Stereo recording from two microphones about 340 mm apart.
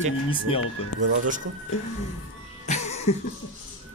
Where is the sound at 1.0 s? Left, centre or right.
Right.